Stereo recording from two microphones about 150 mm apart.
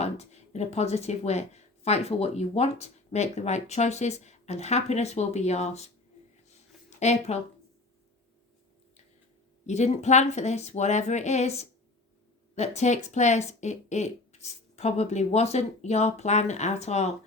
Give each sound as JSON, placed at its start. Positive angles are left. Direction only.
{"t": 0.0, "sound": "speech", "side_deg": 45}
{"t": 7.0, "sound": "speech", "side_deg": 50}
{"t": 9.6, "sound": "speech", "side_deg": 50}